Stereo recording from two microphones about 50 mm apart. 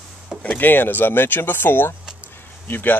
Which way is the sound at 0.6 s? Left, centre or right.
Left.